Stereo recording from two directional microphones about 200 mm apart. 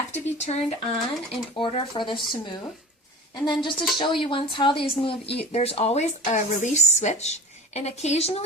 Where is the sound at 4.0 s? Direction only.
25° left (ahead or behind).